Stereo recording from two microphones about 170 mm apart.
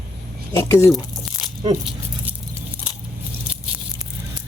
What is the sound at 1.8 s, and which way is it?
Rattle, 5° right (ahead or behind).